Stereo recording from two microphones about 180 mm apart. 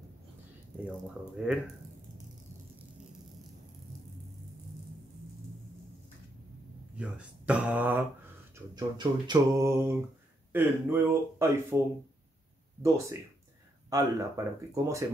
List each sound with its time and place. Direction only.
1.3 s speech: 5° right (ahead or behind)
7.0 s mantra: 5° right (ahead or behind)
8.5 s mantra: 25° right (ahead or behind)
12.8 s mantra: 15° right (ahead or behind)